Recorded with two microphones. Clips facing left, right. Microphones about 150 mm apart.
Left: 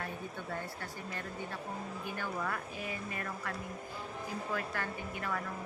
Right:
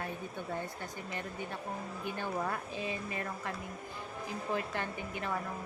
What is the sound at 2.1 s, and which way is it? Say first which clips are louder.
Speech: right 2 dB; 25° right (ahead or behind).